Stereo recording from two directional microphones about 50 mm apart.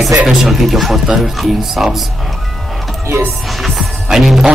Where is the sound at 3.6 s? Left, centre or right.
Centre.